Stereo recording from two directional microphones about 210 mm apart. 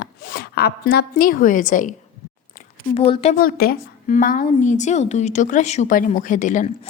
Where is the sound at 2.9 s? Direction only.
25° left (ahead or behind).